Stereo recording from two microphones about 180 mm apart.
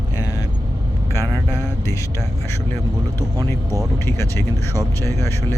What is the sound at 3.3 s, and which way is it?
Speech, 20° right (ahead or behind).